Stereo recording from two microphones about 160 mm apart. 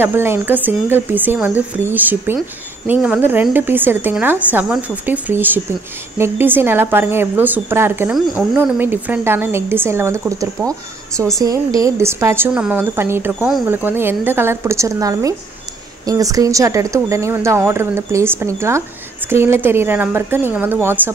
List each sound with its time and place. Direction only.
0.0 s a woman's voice: 15° right (ahead or behind)